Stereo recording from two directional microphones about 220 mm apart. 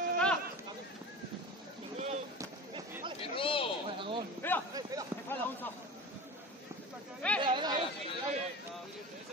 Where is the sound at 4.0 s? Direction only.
20° right (ahead or behind).